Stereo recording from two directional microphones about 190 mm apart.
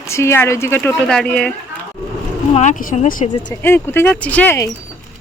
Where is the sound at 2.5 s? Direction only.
40° left (ahead or behind).